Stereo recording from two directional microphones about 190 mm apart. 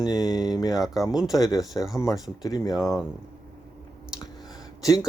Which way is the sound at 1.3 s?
20° left (ahead or behind).